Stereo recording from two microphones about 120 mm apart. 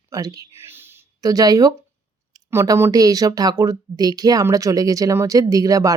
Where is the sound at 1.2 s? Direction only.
30° right (ahead or behind).